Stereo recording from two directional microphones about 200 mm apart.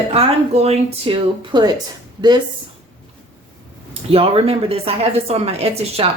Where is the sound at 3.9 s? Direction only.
30° right (ahead or behind).